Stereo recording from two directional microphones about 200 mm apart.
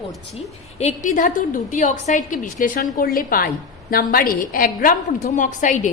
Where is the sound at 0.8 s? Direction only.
40° left (ahead or behind).